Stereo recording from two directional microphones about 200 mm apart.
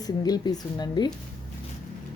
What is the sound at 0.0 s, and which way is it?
Speech, 20° left (ahead or behind).